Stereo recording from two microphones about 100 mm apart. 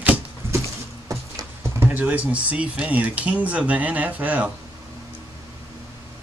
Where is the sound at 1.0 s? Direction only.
35° right (ahead or behind).